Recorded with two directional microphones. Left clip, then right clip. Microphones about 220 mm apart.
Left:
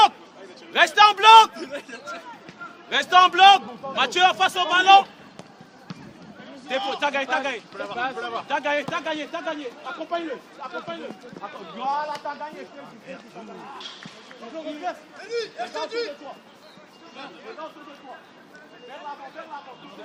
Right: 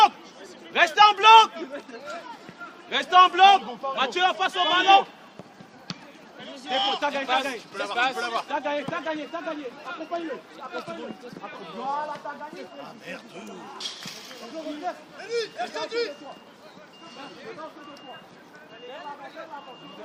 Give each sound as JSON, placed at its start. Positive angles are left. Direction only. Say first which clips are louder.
{"t": 0.7, "sound": "a man's voice", "louder": "left 2 dB", "side_deg": 15}
{"t": 2.9, "sound": "a man's voice", "louder": "left 1 dB", "side_deg": 25}
{"t": 6.7, "sound": "a man's voice", "louder": "right 2 dB", "side_deg": -30}
{"t": 7.0, "sound": "a man's voice", "louder": "left 3 dB", "side_deg": 35}
{"t": 7.8, "sound": "speech", "louder": "right 6 dB", "side_deg": -40}
{"t": 8.4, "sound": "a man's voice", "louder": "left 4 dB", "side_deg": 35}
{"t": 11.8, "sound": "speech", "louder": "left 4 dB", "side_deg": 45}
{"t": 14.9, "sound": "a man's voice", "louder": "left 2 dB", "side_deg": 20}
{"t": 15.2, "sound": "speech", "louder": "right 1 dB", "side_deg": 0}